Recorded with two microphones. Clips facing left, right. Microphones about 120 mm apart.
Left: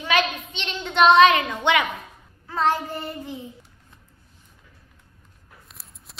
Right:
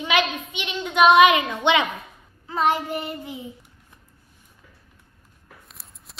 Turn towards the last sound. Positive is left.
turn(degrees=0)  # may be behind; listen again after turning